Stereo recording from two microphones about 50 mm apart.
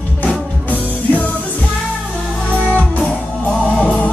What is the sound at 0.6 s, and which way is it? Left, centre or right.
Music, left.